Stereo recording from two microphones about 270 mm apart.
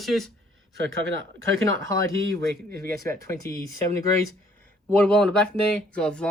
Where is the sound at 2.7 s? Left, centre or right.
Right.